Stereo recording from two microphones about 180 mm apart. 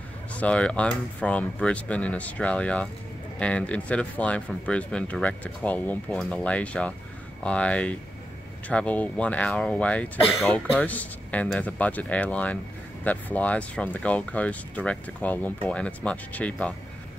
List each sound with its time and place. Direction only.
0.4 s speech: 5° left (ahead or behind)